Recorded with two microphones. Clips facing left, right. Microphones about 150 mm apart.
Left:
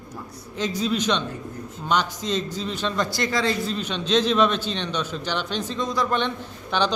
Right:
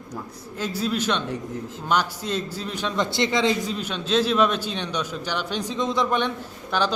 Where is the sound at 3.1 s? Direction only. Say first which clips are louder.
Right 2 dB; 25° right (ahead or behind).